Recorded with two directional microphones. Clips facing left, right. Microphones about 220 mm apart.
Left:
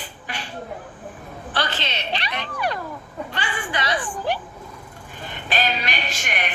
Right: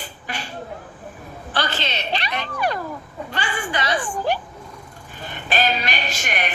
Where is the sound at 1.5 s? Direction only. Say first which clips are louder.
Right 2 dB; 40° right (ahead or behind).